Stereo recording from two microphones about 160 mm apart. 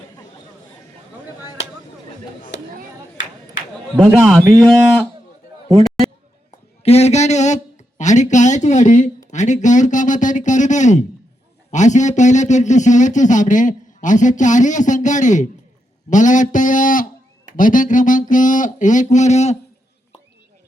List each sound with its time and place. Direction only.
3.9 s speech: 10° right (ahead or behind)
4.4 s speech: 5° left (ahead or behind)
6.8 s a sound: 40° left (ahead or behind)
9.3 s speech: 50° left (ahead or behind)